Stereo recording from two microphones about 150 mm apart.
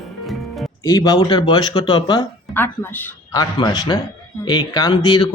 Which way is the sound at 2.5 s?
15° left (ahead or behind).